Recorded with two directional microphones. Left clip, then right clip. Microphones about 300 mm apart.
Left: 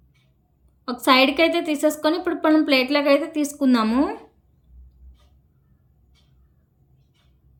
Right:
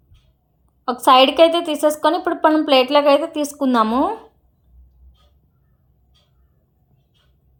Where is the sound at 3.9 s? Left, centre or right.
Left.